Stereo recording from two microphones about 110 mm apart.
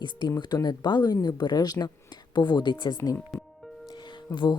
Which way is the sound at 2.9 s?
20° left (ahead or behind).